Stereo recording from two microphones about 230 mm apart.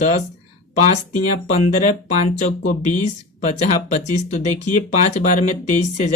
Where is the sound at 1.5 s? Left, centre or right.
Left.